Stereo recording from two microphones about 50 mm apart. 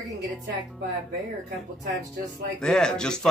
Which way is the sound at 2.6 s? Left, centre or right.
Centre.